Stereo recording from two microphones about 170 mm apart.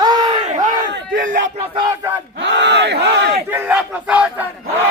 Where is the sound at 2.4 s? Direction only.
90° right.